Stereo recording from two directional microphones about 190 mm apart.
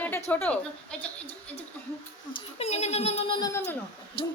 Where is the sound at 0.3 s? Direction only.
10° left (ahead or behind).